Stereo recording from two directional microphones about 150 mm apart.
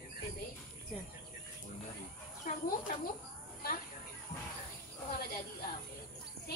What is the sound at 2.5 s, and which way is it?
Speech, 65° left (ahead or behind).